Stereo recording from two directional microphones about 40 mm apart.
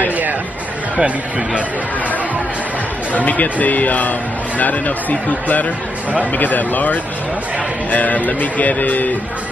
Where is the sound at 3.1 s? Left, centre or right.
Left.